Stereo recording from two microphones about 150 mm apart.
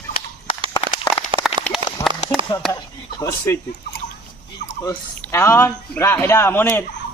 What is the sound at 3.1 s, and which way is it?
Speech, 25° left (ahead or behind).